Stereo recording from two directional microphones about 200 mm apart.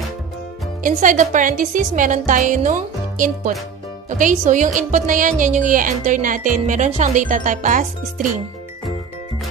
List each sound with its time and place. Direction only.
0.8 s a woman's voice: 40° right (ahead or behind)